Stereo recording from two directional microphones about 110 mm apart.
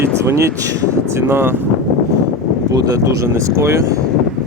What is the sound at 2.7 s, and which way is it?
Speech, 35° right (ahead or behind).